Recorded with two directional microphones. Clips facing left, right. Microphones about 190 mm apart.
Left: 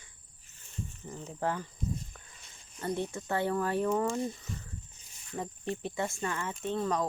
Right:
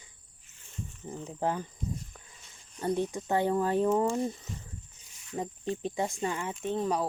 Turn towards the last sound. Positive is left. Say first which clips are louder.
# right 1 dB
turn(degrees=-10)  # may be behind; listen again after turning